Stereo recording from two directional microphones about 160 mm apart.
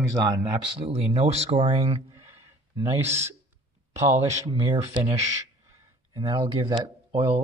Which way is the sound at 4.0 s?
15° right (ahead or behind).